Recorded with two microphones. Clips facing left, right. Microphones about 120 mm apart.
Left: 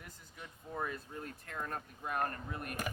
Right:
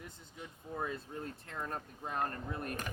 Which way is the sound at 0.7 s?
25° right (ahead or behind).